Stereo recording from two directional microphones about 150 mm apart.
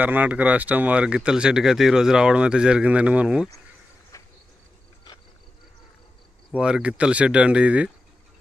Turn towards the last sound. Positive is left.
turn(degrees=-10)  # may be behind; listen again after turning